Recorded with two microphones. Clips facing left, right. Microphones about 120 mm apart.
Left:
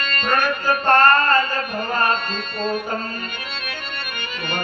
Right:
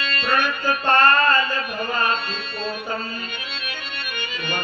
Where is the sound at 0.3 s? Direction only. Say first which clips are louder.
Left 2 dB; 45° left (ahead or behind).